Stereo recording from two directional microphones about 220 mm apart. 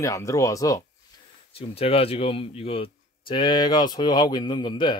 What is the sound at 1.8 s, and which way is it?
Speech, 25° left (ahead or behind).